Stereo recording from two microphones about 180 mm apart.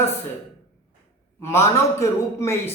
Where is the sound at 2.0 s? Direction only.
15° left (ahead or behind).